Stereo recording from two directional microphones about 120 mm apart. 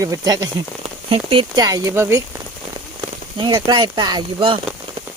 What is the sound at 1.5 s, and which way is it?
Speech, 30° right (ahead or behind).